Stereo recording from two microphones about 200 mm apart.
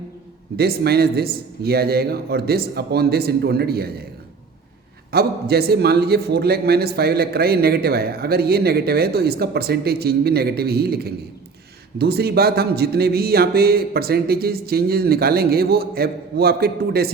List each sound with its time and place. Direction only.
0.5 s a man's voice: 50° right (ahead or behind)
5.1 s a man's voice: 50° right (ahead or behind)